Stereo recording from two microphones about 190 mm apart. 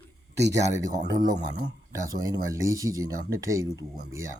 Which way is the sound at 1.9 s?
20° right (ahead or behind).